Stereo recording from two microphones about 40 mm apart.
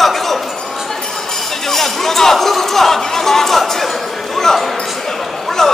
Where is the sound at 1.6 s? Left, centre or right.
Centre.